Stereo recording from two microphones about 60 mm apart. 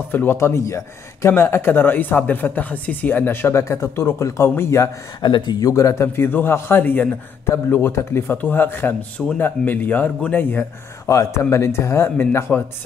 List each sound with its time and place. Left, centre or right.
0.1 s speech: left
0.4 s a man's voice: left
1.3 s speech: left
5.6 s a man's voice: left
6.1 s speech: left
7.9 s speech: left
11.1 s a man's voice: left
11.5 s speech: left